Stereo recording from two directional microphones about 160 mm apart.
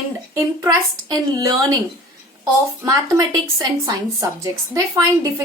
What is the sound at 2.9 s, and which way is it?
A woman's voice, 25° right (ahead or behind).